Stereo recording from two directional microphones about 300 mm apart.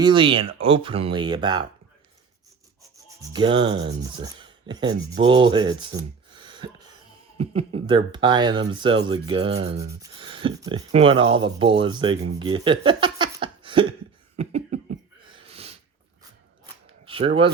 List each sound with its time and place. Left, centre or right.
0.0 s speech: centre
3.2 s speech: centre
6.3 s a sound: centre
7.3 s speech: centre
14.3 s cough: right
15.2 s sneeze: centre
17.1 s speech: centre